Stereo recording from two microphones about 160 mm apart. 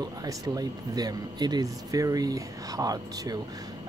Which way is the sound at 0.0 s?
25° right (ahead or behind).